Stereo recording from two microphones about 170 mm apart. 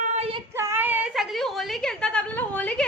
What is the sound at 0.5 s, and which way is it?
A woman's voice, 15° right (ahead or behind).